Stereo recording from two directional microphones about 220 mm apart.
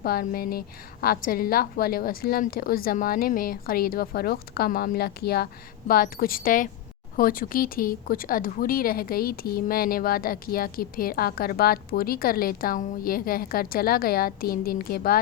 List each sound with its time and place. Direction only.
0.0 s a woman's voice: 45° left (ahead or behind)